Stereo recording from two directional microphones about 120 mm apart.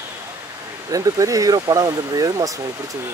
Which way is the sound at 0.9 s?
30° right (ahead or behind).